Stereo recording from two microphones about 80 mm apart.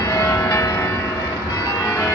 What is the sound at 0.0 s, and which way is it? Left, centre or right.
Change ringing, left.